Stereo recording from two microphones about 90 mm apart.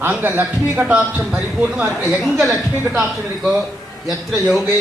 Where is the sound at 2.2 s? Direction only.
5° right (ahead or behind).